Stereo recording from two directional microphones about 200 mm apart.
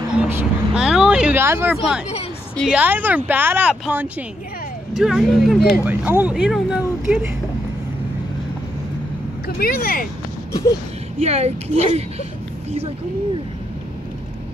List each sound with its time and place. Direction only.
0.2 s vehicle: 5° right (ahead or behind)
2.5 s speech: centre (ahead or behind)
9.6 s speech: 45° left (ahead or behind)
11.1 s speech: 35° right (ahead or behind)